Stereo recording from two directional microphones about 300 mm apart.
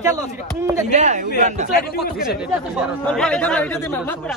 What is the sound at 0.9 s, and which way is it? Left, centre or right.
Speech, right.